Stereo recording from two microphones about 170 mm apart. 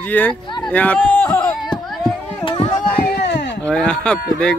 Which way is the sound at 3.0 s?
80° left.